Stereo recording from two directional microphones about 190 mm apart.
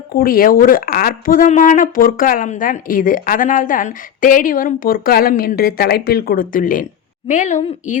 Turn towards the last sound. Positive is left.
turn(degrees=40)  # may be behind; listen again after turning